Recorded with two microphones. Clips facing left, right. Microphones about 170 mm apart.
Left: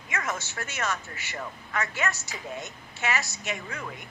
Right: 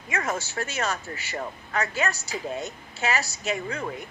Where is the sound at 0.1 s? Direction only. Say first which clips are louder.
Right 4 dB; 35° right (ahead or behind).